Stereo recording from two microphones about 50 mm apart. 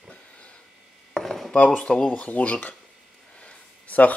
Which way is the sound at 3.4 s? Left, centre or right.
Left.